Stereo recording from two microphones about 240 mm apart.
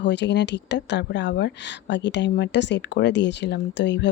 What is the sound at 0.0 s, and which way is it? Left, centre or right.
Speech, left.